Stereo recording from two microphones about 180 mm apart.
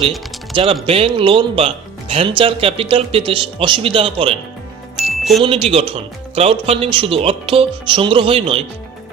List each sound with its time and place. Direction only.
0.5 s speech: 30° right (ahead or behind)
4.9 s music: centre (ahead or behind)
5.4 s speech: 30° right (ahead or behind)